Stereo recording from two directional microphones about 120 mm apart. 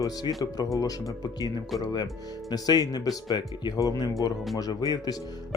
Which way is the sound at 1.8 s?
30° left (ahead or behind).